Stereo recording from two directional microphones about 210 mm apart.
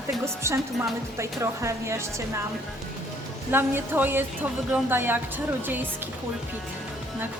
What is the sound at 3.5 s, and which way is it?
Speech, 10° right (ahead or behind).